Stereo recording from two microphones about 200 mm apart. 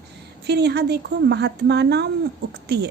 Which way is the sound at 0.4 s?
55° right (ahead or behind).